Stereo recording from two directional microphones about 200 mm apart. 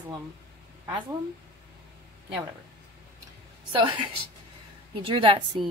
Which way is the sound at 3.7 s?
25° right (ahead or behind).